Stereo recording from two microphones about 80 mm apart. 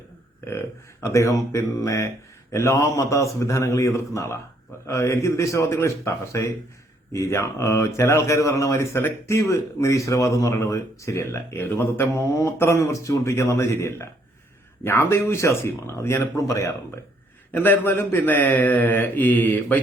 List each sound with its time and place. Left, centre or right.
1.1 s speech: left
17.5 s speech: left